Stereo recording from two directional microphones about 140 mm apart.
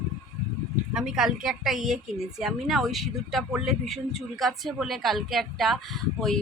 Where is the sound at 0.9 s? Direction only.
5° right (ahead or behind).